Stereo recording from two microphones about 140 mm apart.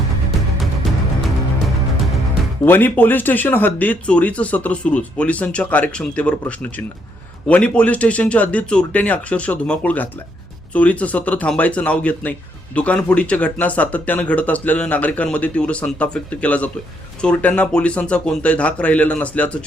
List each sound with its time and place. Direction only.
2.6 s speech: 15° left (ahead or behind)